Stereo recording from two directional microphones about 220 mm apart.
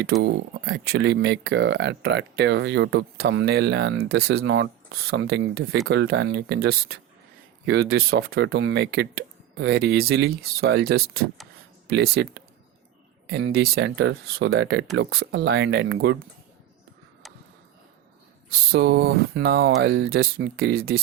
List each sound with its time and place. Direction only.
0.0 s speech: 50° right (ahead or behind)
18.7 s speech: 50° right (ahead or behind)